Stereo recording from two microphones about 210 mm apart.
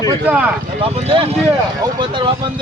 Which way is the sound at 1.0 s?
25° right (ahead or behind).